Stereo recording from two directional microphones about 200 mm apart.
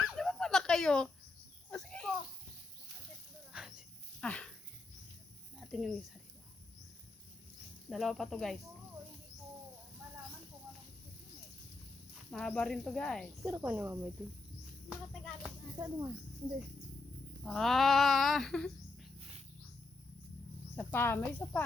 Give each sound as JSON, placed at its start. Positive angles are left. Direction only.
{"t": 0.1, "sound": "dog", "side_deg": 0}
{"t": 1.7, "sound": "a sound", "side_deg": 5}
{"t": 3.5, "sound": "cricket", "side_deg": -5}
{"t": 5.5, "sound": "a sound", "side_deg": 0}
{"t": 7.9, "sound": "speech", "side_deg": 0}
{"t": 12.1, "sound": "speech", "side_deg": 0}
{"t": 15.8, "sound": "speech", "side_deg": -20}
{"t": 17.4, "sound": "speech", "side_deg": 0}
{"t": 20.7, "sound": "speech", "side_deg": 10}